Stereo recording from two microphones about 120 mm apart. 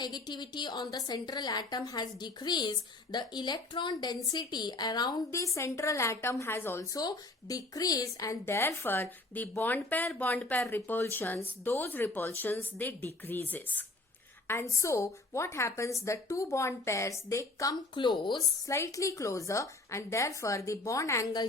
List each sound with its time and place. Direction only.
0.0 s a woman's voice: 35° left (ahead or behind)
7.0 s a woman's voice: 30° left (ahead or behind)
17.9 s a woman's voice: 40° left (ahead or behind)
18.7 s a woman's voice: 25° left (ahead or behind)